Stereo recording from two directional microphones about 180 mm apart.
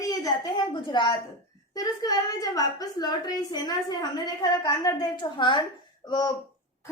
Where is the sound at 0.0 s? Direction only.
20° left (ahead or behind).